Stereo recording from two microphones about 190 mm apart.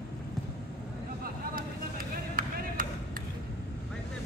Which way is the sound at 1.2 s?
50° right (ahead or behind).